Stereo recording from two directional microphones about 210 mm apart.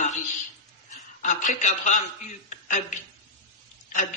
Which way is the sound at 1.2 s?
35° left (ahead or behind).